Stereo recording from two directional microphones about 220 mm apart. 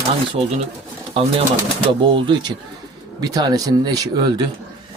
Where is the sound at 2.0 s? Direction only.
20° right (ahead or behind).